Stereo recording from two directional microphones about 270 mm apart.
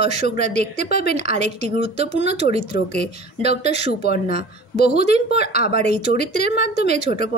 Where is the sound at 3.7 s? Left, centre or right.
Left.